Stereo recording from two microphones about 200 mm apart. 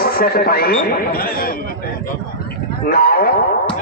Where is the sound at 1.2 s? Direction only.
45° left (ahead or behind).